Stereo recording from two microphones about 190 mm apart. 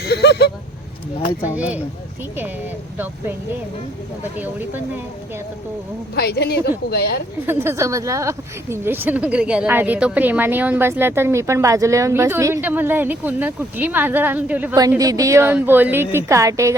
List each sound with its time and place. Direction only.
0.0 s a sound: 60° left (ahead or behind)
1.4 s speech: 5° right (ahead or behind)
6.1 s a woman's voice: 60° left (ahead or behind)
7.4 s speech: 10° right (ahead or behind)